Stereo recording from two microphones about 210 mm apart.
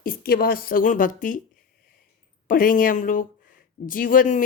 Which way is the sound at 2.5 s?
40° left (ahead or behind).